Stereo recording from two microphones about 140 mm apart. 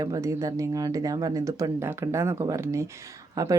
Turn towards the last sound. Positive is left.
turn(degrees=-25)  # may be behind; listen again after turning